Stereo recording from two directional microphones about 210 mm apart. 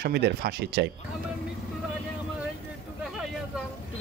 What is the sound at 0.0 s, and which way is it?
Speech, 50° right (ahead or behind).